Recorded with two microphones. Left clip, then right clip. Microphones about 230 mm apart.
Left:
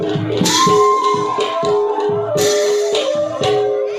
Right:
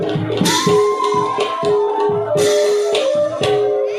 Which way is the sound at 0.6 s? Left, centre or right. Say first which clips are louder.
Left 3 dB; right.